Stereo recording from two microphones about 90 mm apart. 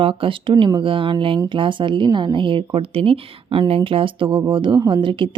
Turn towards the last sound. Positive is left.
turn(degrees=-70)  # may be behind; listen again after turning